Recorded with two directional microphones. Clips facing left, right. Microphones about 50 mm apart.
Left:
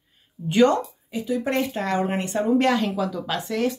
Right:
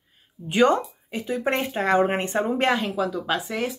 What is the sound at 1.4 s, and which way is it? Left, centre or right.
Speech, right.